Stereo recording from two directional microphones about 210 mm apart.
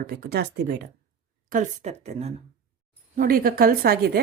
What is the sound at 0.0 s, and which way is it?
Speech, 45° right (ahead or behind).